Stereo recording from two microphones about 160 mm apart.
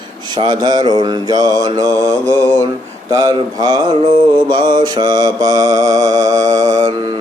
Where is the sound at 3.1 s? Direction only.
25° right (ahead or behind).